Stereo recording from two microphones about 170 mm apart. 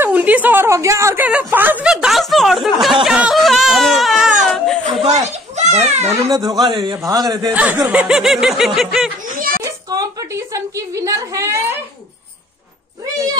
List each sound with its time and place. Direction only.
0.0 s a woman's voice: 10° right (ahead or behind)
3.1 s a sound: 5° right (ahead or behind)
5.6 s a child's voice: 40° right (ahead or behind)
6.2 s a man's voice: 25° right (ahead or behind)
7.5 s a woman's voice: 10° right (ahead or behind)
9.6 s a woman's voice: 20° right (ahead or behind)